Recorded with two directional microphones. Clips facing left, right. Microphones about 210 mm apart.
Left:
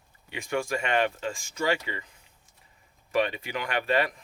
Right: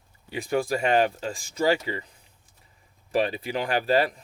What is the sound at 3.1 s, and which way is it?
Speech, 35° right (ahead or behind).